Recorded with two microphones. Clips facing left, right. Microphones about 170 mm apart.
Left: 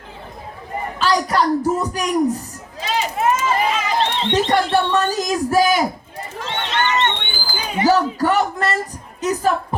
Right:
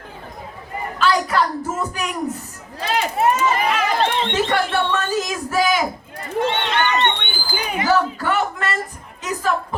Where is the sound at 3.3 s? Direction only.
60° right (ahead or behind).